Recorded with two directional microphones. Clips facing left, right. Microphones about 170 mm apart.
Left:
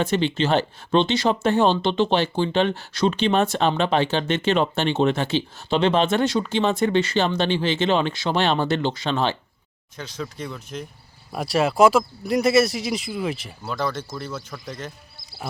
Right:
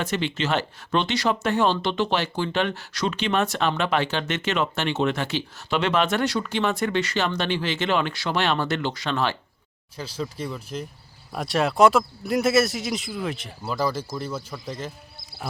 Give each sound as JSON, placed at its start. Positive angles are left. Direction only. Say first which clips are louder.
{"t": 0.0, "sound": "speech", "louder": "left 5 dB", "side_deg": 30}
{"t": 10.3, "sound": "speech", "louder": "right 1 dB", "side_deg": -5}